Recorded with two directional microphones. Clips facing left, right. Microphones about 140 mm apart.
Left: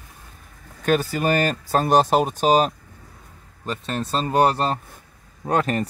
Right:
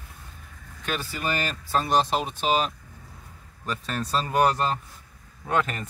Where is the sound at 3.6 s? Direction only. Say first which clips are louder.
Left 3 dB; 25° left (ahead or behind).